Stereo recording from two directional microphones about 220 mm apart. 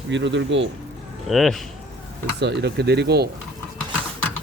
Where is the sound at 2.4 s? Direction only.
50° right (ahead or behind).